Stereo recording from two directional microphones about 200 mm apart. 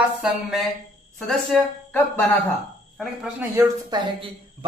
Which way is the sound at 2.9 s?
5° right (ahead or behind).